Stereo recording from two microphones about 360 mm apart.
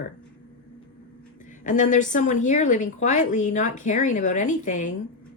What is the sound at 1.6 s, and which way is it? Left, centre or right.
Speech, left.